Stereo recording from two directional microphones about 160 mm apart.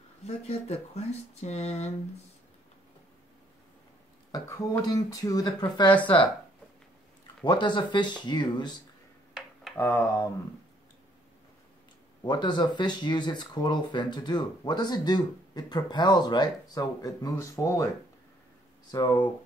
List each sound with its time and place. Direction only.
0.2 s speech: 45° left (ahead or behind)
4.3 s speech: 20° left (ahead or behind)
5.9 s speech: 10° left (ahead or behind)
7.4 s speech: 30° left (ahead or behind)
9.8 s speech: 15° left (ahead or behind)
12.2 s speech: 30° left (ahead or behind)
18.9 s speech: 25° left (ahead or behind)